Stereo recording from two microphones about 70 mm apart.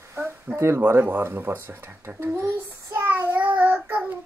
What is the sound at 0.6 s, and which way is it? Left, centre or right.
Speech, right.